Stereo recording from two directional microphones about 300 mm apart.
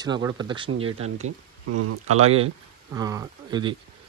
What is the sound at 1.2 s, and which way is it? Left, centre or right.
Speech, right.